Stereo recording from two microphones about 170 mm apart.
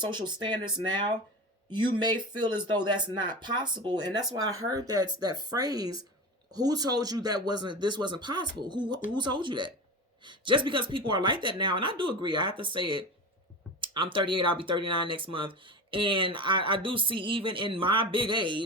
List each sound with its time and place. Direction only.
0.0 s speech: 25° right (ahead or behind)